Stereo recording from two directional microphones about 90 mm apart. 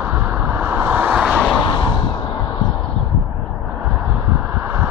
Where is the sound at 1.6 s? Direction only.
65° left (ahead or behind).